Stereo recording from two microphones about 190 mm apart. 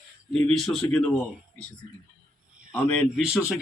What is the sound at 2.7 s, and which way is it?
Speech, 5° left (ahead or behind).